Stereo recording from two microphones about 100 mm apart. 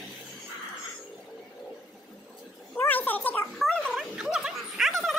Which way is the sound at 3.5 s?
5° left (ahead or behind).